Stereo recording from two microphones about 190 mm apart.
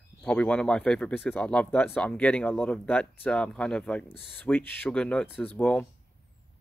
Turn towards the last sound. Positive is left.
turn(degrees=10)  # may be behind; listen again after turning